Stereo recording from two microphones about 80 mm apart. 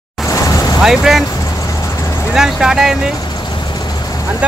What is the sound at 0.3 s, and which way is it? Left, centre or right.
Vehicle, left.